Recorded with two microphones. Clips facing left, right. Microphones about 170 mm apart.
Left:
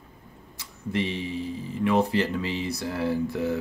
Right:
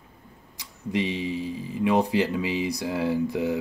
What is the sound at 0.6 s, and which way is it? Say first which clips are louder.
Speech: right 1 dB; 15° right (ahead or behind).